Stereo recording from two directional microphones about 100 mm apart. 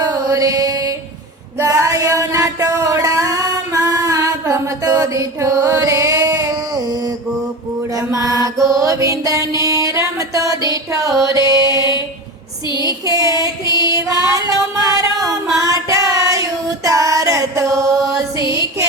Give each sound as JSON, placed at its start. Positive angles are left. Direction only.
{"t": 0.0, "sound": "mantra", "side_deg": -40}
{"t": 1.5, "sound": "a sound", "side_deg": -30}
{"t": 7.9, "sound": "mantra", "side_deg": -35}
{"t": 8.8, "sound": "music", "side_deg": -35}
{"t": 12.8, "sound": "female singing", "side_deg": -35}
{"t": 18.3, "sound": "music", "side_deg": 55}